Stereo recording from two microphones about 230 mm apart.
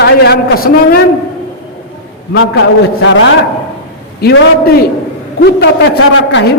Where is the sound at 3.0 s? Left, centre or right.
Left.